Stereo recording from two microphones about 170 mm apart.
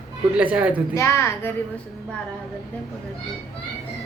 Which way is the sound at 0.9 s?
15° left (ahead or behind).